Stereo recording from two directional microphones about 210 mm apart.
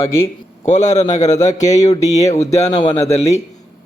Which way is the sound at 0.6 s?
35° left (ahead or behind).